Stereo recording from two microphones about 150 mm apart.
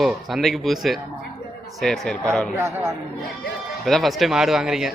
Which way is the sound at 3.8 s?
Centre (ahead or behind).